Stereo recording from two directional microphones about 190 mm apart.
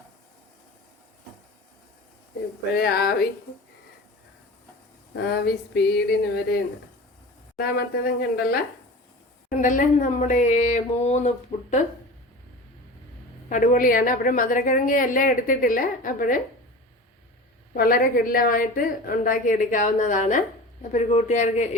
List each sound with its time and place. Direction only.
2.7 s a sound: 55° left (ahead or behind)
5.1 s a sound: 60° left (ahead or behind)
7.6 s a woman's voice: 55° left (ahead or behind)
9.5 s speech: 45° left (ahead or behind)
13.5 s a woman's voice: 45° left (ahead or behind)
17.7 s a woman's voice: 50° left (ahead or behind)